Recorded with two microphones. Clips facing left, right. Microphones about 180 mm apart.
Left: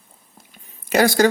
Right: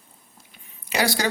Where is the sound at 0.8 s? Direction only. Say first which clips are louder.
Left 9 dB; 50° left (ahead or behind).